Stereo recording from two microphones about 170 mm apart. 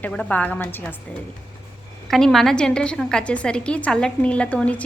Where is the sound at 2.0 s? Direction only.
Centre (ahead or behind).